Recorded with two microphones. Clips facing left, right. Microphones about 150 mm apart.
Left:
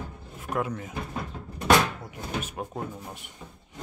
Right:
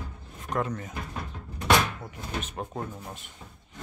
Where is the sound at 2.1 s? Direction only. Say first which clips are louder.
Left 2 dB; 5° left (ahead or behind).